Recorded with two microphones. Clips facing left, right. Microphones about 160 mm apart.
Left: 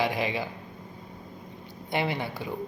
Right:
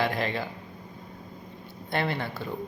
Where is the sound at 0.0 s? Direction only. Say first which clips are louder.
Even; 15° left (ahead or behind).